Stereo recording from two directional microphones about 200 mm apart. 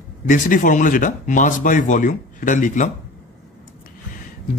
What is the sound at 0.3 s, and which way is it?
Speech, 40° left (ahead or behind).